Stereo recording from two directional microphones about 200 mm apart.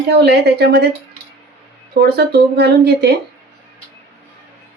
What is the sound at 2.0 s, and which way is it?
Speech, 55° right (ahead or behind).